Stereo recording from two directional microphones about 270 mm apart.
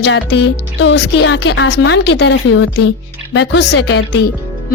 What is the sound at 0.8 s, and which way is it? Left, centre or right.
A woman's voice, left.